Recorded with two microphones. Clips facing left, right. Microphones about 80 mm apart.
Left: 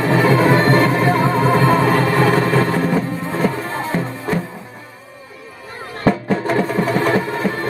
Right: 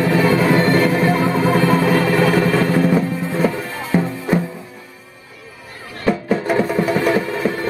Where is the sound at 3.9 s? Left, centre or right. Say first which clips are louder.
Right 6 dB; centre.